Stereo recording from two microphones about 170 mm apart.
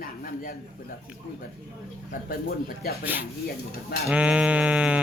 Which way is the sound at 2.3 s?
60° left (ahead or behind).